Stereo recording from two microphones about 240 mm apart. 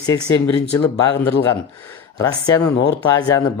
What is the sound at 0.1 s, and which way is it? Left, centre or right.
Speech, centre.